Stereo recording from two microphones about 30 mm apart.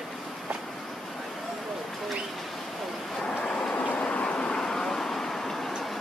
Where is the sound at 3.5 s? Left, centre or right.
Centre.